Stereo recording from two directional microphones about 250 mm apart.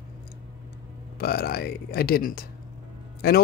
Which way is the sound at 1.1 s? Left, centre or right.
Left.